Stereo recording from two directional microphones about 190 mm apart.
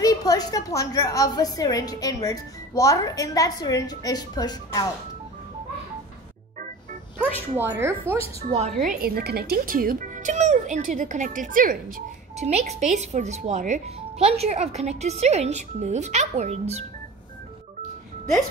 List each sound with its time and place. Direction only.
0.0 s a woman's voice: 20° left (ahead or behind)
7.5 s speech: 10° right (ahead or behind)
8.5 s speech: 35° right (ahead or behind)
8.8 s a child's voice: 50° right (ahead or behind)